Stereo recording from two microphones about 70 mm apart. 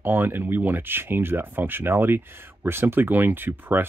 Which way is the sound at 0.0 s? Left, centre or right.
Right.